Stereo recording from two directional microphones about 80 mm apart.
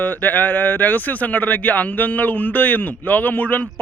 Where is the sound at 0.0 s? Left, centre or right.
Left.